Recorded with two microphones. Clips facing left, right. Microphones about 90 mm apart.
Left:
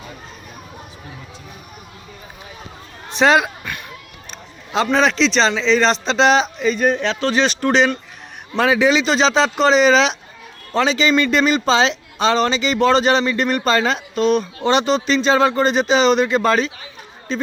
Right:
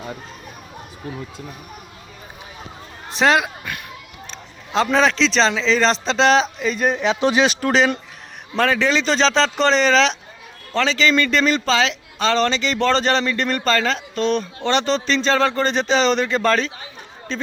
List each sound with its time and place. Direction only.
3.1 s a man's voice: centre (ahead or behind)
3.6 s a sound: 5° right (ahead or behind)
4.3 s a man's voice: centre (ahead or behind)
8.5 s speech: 10° left (ahead or behind)
12.3 s speech: 10° left (ahead or behind)